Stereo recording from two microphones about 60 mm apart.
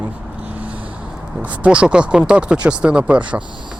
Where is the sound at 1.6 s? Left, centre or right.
Centre.